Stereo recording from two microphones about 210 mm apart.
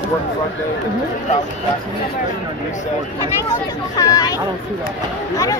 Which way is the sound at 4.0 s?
15° left (ahead or behind).